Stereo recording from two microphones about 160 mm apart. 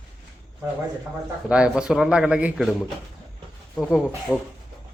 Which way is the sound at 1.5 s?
5° right (ahead or behind).